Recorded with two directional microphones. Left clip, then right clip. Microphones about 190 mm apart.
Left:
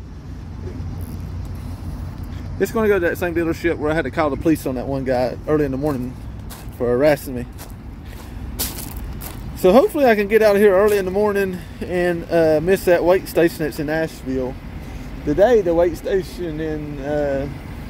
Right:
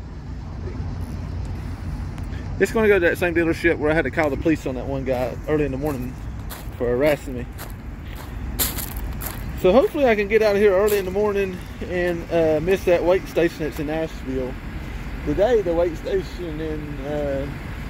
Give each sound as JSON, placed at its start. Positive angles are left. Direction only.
{"t": 2.6, "sound": "speech", "side_deg": 10}
{"t": 4.3, "sound": "speech", "side_deg": 30}
{"t": 9.6, "sound": "speech", "side_deg": 30}